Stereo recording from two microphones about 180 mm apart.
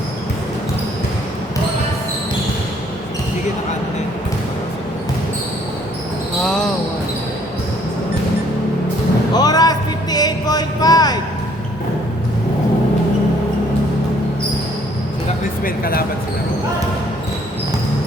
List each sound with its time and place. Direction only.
6.4 s basketball bounce: 5° left (ahead or behind)
9.3 s music: 20° left (ahead or behind)
15.6 s a sound: 55° left (ahead or behind)